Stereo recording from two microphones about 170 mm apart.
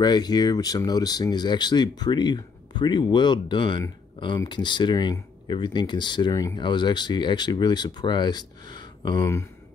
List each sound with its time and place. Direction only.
0.0 s speech: 25° left (ahead or behind)